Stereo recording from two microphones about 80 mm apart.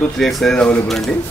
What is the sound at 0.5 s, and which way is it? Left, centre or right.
Speech, centre.